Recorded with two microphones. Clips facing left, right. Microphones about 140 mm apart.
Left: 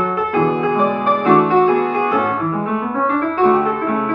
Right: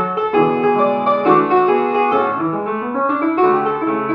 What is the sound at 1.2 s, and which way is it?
Music, 20° right (ahead or behind).